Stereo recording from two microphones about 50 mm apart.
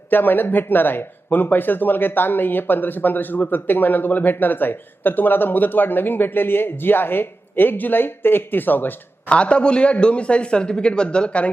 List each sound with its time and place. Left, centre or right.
0.1 s speech: left
9.3 s a man's voice: left